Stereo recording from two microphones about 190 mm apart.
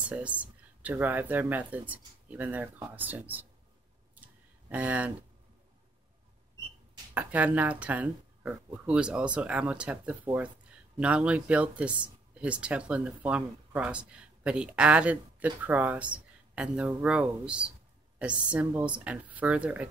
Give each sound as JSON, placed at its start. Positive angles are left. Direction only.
{"t": 0.0, "sound": "speech", "side_deg": -5}
{"t": 4.1, "sound": "a sound", "side_deg": -10}
{"t": 7.2, "sound": "speech", "side_deg": -10}